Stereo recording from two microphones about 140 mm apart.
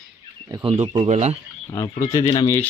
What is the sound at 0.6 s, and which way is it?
Speech, 40° right (ahead or behind).